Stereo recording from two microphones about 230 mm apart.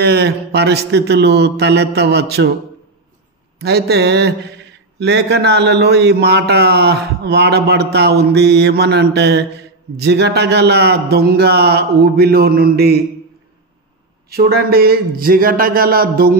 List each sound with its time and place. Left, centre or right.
0.0 s speech: right
3.5 s speech: right
14.3 s speech: right